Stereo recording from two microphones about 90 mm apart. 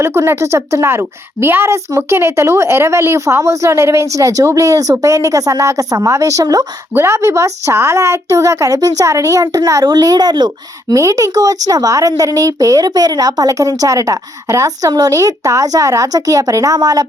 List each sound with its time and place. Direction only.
0.0 s speech: 30° right (ahead or behind)
6.9 s speech: 30° right (ahead or behind); by 10.9 s 50° right (ahead or behind)
10.9 s speech: 35° right (ahead or behind)